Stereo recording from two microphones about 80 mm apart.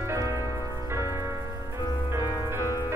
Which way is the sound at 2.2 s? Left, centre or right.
Left.